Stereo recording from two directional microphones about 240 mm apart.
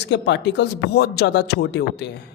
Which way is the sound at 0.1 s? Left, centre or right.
Left.